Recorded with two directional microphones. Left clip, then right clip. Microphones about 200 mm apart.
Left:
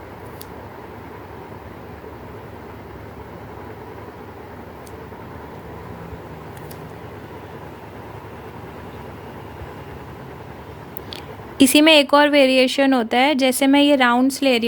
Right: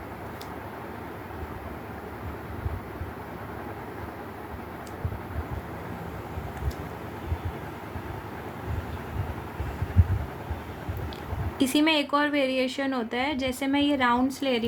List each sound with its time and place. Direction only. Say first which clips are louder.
11.5 s speech: left 11 dB; 55° left (ahead or behind)